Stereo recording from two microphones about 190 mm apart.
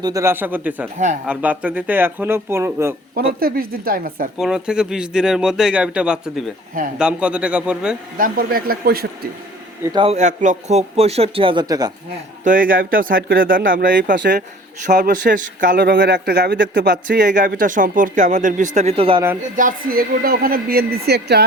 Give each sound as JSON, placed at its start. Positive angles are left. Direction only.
{"t": 0.0, "sound": "speech", "side_deg": -15}
{"t": 3.2, "sound": "a man's voice", "side_deg": -50}
{"t": 4.4, "sound": "speech", "side_deg": -5}
{"t": 8.2, "sound": "a man's voice", "side_deg": -50}
{"t": 9.8, "sound": "a man's voice", "side_deg": -25}
{"t": 12.5, "sound": "a man's voice", "side_deg": -45}
{"t": 19.5, "sound": "a man's voice", "side_deg": -45}